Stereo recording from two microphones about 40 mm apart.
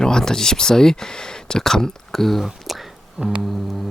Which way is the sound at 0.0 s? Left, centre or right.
Centre.